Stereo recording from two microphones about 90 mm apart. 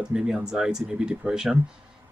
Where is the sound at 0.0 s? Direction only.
10° right (ahead or behind).